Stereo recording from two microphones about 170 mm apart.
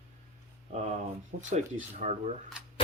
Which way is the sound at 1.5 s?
45° right (ahead or behind).